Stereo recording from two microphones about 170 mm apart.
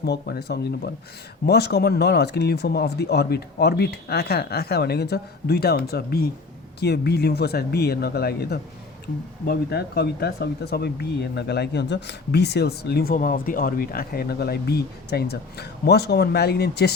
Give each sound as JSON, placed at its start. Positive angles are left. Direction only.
{"t": 0.0, "sound": "speech", "side_deg": 70}